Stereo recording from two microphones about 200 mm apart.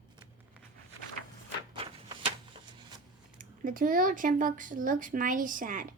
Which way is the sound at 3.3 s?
40° right (ahead or behind).